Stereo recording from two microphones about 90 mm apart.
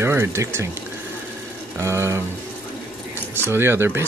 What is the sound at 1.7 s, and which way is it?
Speech, 30° right (ahead or behind).